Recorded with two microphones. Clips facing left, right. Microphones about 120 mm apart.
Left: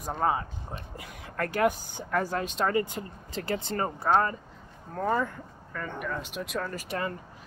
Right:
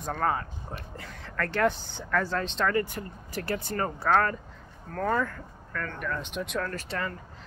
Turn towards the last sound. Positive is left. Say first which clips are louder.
# right 1 dB
turn(degrees=10)  # may be behind; listen again after turning